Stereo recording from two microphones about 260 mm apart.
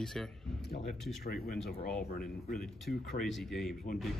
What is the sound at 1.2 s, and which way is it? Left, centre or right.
Speech, left.